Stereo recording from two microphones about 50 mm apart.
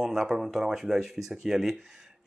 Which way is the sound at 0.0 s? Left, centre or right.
Centre.